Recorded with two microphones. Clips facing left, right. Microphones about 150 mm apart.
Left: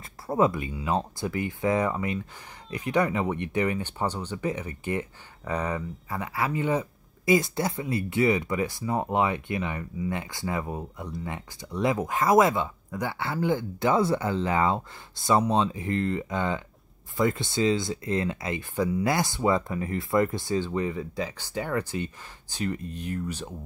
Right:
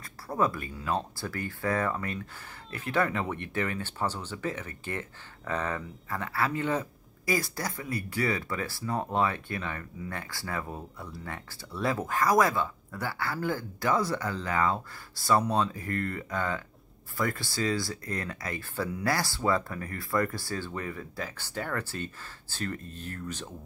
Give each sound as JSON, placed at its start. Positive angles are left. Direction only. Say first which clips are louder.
{"t": 0.0, "sound": "speech", "louder": "left 5 dB", "side_deg": 25}